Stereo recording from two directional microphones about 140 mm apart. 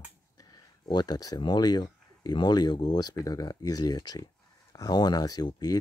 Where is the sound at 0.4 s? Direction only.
30° left (ahead or behind).